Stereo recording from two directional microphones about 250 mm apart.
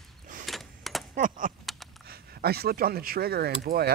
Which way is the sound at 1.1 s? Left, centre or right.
Right.